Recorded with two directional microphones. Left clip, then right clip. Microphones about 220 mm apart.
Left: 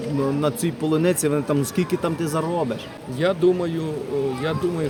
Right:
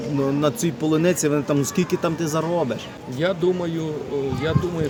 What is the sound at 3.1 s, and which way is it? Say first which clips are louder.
Speech: left 2 dB; 10° left (ahead or behind).